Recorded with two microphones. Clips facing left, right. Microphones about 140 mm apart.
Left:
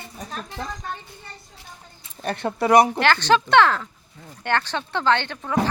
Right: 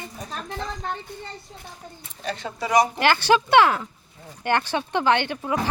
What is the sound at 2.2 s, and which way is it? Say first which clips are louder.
Speech: left 6 dB; 60° left (ahead or behind).